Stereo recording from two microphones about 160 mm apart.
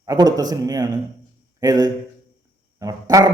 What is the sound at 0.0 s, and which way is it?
A man's voice, 25° right (ahead or behind).